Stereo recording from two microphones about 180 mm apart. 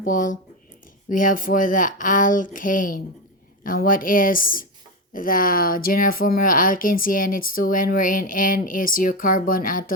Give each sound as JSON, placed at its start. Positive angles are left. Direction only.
{"t": 0.0, "sound": "a woman's voice", "side_deg": 45}